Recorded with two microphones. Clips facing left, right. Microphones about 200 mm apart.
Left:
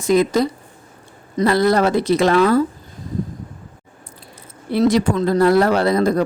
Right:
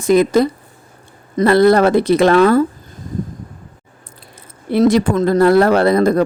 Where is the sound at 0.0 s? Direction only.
55° right (ahead or behind).